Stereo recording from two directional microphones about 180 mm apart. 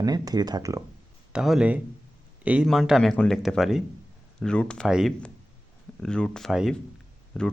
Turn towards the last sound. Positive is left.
turn(degrees=0)  # may be behind; listen again after turning